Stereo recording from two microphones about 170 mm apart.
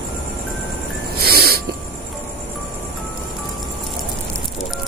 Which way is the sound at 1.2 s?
65° right (ahead or behind).